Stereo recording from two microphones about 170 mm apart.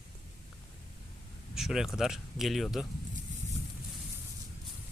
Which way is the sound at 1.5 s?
5° right (ahead or behind).